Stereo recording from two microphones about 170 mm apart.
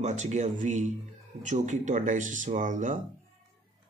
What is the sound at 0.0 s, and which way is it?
Speech, 45° right (ahead or behind).